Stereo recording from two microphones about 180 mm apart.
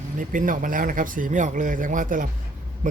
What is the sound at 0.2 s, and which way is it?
Speech, 50° right (ahead or behind).